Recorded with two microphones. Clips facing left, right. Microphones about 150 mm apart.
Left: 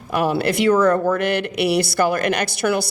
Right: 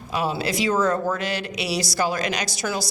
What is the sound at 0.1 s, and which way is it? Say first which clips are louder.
Speech: left 5 dB; 60° left (ahead or behind).